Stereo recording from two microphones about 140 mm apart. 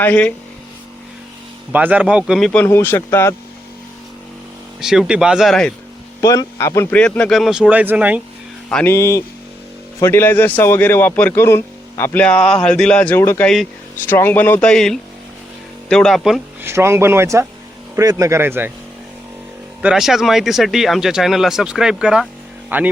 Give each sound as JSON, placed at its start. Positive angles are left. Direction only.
{"t": 0.0, "sound": "a man's voice", "side_deg": 10}
{"t": 1.7, "sound": "speech", "side_deg": -10}
{"t": 2.5, "sound": "a man's voice", "side_deg": 15}
{"t": 4.8, "sound": "speech", "side_deg": -5}
{"t": 6.2, "sound": "a man's voice", "side_deg": 25}
{"t": 6.9, "sound": "speech", "side_deg": 10}
{"t": 8.7, "sound": "a man's voice", "side_deg": 15}
{"t": 16.6, "sound": "speech", "side_deg": -20}
{"t": 19.8, "sound": "speech", "side_deg": -5}